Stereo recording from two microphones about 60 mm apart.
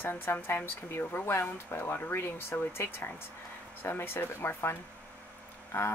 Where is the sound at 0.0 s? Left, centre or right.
Left.